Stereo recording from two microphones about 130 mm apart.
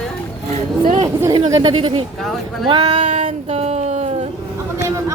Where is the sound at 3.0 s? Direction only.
70° right (ahead or behind); by 4.3 s 55° right (ahead or behind).